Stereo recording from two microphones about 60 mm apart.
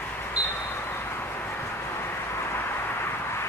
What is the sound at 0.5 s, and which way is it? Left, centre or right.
Vehicle, left.